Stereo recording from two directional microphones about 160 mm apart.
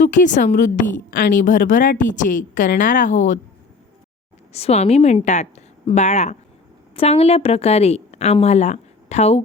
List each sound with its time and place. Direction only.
0.0 s a woman's voice: 50° left (ahead or behind)
4.5 s a woman's voice: 40° left (ahead or behind)